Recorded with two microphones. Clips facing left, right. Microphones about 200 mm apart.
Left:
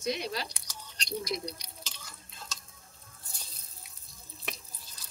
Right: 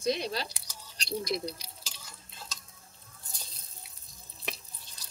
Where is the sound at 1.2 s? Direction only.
30° right (ahead or behind).